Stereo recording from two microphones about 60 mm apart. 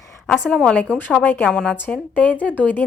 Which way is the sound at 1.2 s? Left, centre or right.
Left.